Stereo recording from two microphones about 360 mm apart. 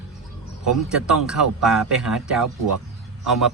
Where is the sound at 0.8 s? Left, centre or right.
Centre.